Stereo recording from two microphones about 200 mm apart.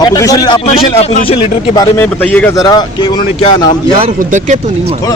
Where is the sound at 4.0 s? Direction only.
35° right (ahead or behind).